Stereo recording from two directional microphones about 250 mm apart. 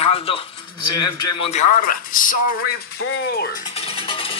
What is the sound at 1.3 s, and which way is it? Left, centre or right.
Speech, left.